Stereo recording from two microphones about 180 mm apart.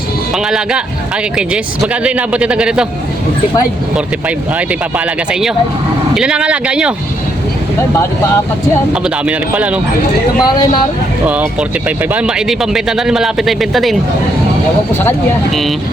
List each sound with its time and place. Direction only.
0.3 s speech: 5° right (ahead or behind)
1.8 s a man's voice: 5° right (ahead or behind)
4.5 s speech: 5° right (ahead or behind)
9.0 s a man's voice: 5° right (ahead or behind)
10.4 s a man's voice: 25° left (ahead or behind)
11.9 s speech: 5° right (ahead or behind)